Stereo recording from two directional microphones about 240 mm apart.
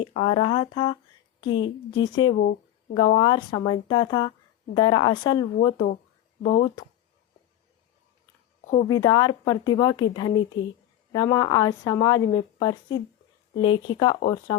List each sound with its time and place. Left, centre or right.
0.0 s a woman's voice: left
2.3 s speech: left
2.9 s a woman's voice: centre
8.9 s speech: centre